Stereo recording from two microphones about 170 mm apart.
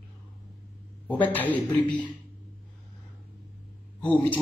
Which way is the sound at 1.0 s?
10° left (ahead or behind).